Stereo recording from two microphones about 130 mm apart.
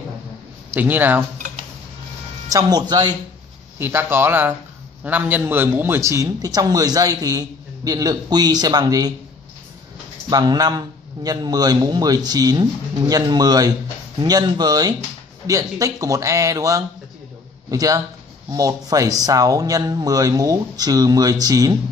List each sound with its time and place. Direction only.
0.7 s speech: 15° right (ahead or behind)
2.5 s a man's voice: 30° right (ahead or behind)
3.7 s a man's voice: 15° right (ahead or behind)
10.3 s a man's voice: 30° right (ahead or behind)